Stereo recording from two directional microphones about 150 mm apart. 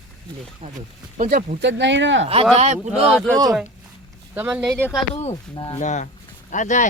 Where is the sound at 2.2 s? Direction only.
40° right (ahead or behind).